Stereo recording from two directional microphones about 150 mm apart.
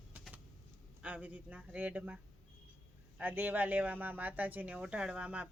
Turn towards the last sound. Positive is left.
turn(degrees=-10)  # may be behind; listen again after turning